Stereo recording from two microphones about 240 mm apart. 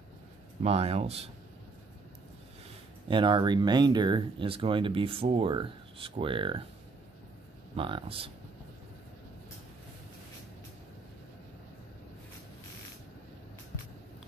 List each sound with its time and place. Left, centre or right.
0.6 s speech: right
3.1 s speech: centre
7.7 s speech: right